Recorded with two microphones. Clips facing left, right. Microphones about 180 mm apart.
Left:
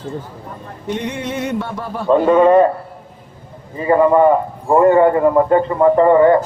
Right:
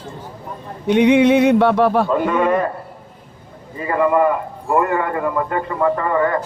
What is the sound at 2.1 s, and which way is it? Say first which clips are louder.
Speech: left 6 dB; 30° left (ahead or behind).